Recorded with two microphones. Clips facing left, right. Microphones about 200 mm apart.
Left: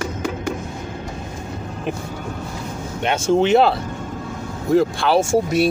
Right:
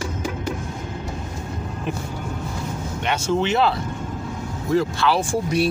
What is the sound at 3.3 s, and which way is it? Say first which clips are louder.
Speech: left 6 dB; 50° left (ahead or behind).